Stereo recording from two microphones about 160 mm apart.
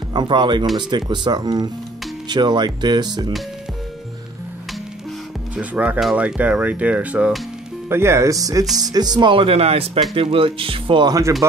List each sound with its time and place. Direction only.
0.1 s speech: 30° right (ahead or behind)
5.6 s speech: 10° right (ahead or behind)